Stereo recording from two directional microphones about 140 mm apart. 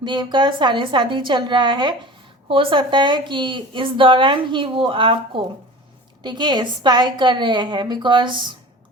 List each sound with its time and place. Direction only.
0.0 s a woman's voice: 35° right (ahead or behind)
6.2 s a woman's voice: 30° right (ahead or behind)